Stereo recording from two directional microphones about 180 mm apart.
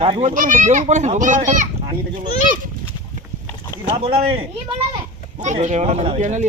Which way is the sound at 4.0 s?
30° right (ahead or behind).